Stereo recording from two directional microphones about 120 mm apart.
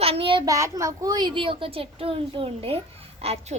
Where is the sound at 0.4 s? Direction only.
25° right (ahead or behind).